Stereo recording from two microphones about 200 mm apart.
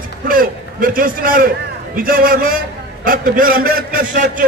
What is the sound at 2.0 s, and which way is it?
A man's voice, 45° right (ahead or behind).